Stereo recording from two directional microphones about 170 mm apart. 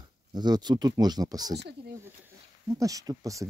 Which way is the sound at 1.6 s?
75° right (ahead or behind).